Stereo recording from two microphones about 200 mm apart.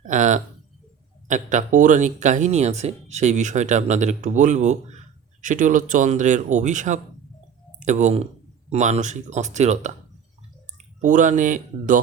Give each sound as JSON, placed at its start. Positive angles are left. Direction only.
{"t": 0.0, "sound": "a sound", "side_deg": -40}
{"t": 1.3, "sound": "speech", "side_deg": -40}
{"t": 11.0, "sound": "speech", "side_deg": -40}